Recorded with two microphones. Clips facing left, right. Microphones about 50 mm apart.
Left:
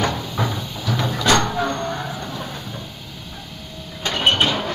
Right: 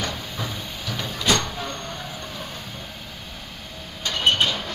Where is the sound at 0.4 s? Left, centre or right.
Left.